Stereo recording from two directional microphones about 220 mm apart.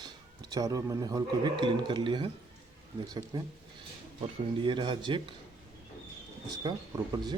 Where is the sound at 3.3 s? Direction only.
20° right (ahead or behind).